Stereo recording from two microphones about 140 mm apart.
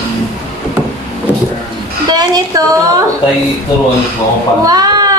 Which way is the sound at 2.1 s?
30° right (ahead or behind).